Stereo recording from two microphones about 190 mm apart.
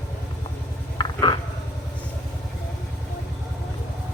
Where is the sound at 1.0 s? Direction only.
25° left (ahead or behind).